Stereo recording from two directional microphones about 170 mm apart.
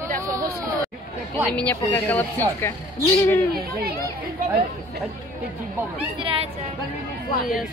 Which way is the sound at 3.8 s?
65° right (ahead or behind).